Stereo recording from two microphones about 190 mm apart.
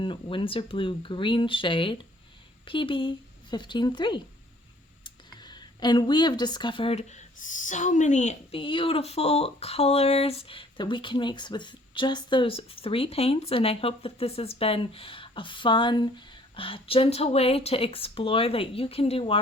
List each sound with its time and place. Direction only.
0.0 s speech: 25° left (ahead or behind)